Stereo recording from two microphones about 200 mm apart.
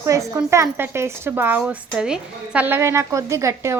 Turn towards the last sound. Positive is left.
turn(degrees=-15)  # may be behind; listen again after turning